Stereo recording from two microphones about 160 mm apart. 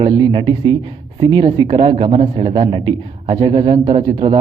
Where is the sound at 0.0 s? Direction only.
30° right (ahead or behind).